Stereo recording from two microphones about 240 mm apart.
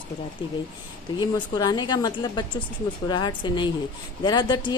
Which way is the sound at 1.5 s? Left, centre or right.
Centre.